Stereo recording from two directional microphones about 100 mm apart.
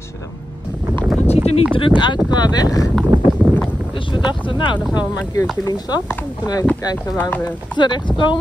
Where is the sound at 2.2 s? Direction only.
45° left (ahead or behind).